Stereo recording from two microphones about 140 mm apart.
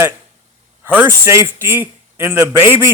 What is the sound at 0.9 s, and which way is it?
A man's voice, 15° right (ahead or behind).